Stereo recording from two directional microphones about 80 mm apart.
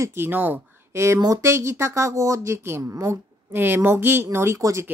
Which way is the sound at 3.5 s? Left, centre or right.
Right.